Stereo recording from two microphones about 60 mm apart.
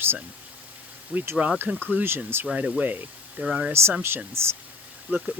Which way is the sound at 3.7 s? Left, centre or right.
Right.